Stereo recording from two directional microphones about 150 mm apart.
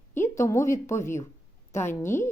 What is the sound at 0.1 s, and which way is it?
A woman's voice, 15° left (ahead or behind).